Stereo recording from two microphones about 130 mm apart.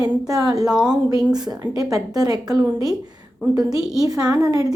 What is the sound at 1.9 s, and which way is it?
A woman's voice, 30° right (ahead or behind).